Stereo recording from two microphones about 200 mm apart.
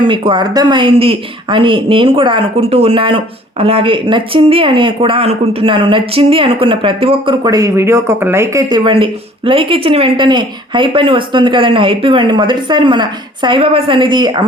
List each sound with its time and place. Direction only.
0.0 s speech: 25° right (ahead or behind)